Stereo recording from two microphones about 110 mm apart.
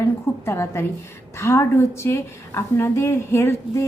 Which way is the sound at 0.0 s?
25° left (ahead or behind).